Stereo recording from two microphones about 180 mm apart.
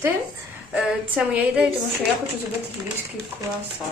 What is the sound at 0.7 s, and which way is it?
Speech, 5° right (ahead or behind).